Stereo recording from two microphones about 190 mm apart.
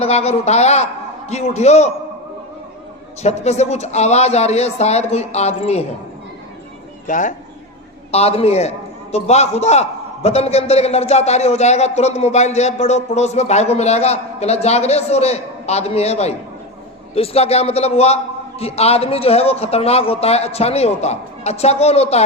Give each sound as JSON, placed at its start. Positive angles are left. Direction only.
{"t": 0.0, "sound": "speech", "side_deg": 35}
{"t": 3.2, "sound": "speech", "side_deg": 35}
{"t": 7.1, "sound": "speech", "side_deg": 40}